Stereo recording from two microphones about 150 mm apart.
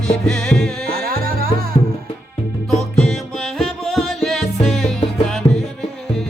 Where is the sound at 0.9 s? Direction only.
80° right.